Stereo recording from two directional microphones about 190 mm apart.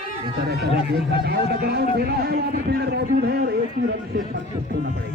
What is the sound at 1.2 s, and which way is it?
Speech, 55° right (ahead or behind).